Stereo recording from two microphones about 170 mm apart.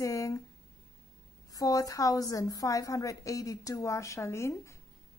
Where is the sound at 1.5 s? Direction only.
20° left (ahead or behind).